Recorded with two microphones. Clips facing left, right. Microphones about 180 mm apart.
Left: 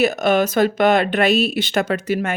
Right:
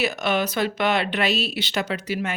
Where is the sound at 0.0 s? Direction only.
45° left (ahead or behind).